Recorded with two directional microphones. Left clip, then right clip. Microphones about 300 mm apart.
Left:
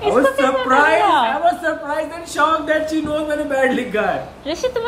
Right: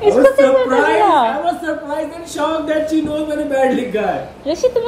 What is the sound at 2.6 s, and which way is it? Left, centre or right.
Speech, centre.